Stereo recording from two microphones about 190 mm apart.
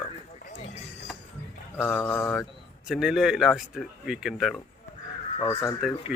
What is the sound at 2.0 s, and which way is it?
Speech, 20° left (ahead or behind).